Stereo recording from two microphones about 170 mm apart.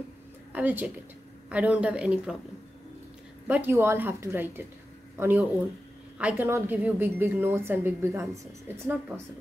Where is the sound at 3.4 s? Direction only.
10° right (ahead or behind).